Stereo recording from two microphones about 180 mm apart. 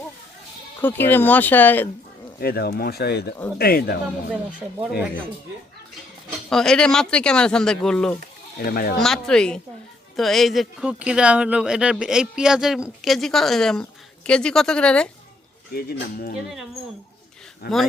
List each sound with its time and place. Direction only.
0.8 s speech: 10° left (ahead or behind)
2.4 s speech: 60° left (ahead or behind)
6.5 s speech: 5° left (ahead or behind)
8.5 s speech: 55° left (ahead or behind)
9.0 s speech: 5° left (ahead or behind)
15.7 s speech: 60° left (ahead or behind)
17.6 s speech: 60° left (ahead or behind)